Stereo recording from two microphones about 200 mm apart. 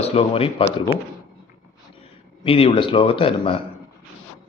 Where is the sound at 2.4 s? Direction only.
30° left (ahead or behind).